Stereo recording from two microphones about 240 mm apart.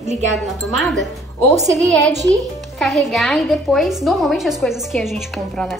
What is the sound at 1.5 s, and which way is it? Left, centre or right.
Speech, centre.